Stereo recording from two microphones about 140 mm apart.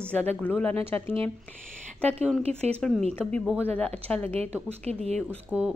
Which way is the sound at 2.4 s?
45° right (ahead or behind).